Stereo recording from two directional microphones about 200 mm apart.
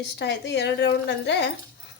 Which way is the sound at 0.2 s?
60° left (ahead or behind).